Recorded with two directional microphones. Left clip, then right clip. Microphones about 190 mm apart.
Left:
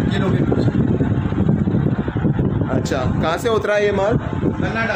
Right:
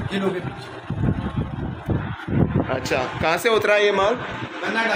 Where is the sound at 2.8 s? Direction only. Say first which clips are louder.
Even; 20° left (ahead or behind).